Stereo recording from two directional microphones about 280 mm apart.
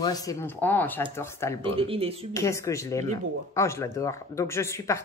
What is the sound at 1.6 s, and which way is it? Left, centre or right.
Speech, centre.